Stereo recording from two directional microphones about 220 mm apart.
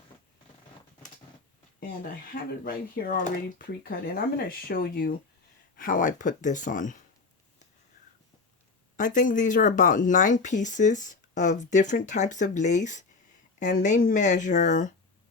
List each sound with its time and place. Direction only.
2.3 s speech: 40° left (ahead or behind)
9.0 s speech: 35° left (ahead or behind)